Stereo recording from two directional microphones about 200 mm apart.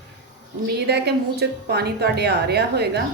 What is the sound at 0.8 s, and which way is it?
A woman's voice, 55° right (ahead or behind).